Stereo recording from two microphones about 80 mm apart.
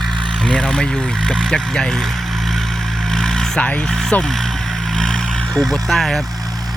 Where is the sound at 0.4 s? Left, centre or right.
Centre.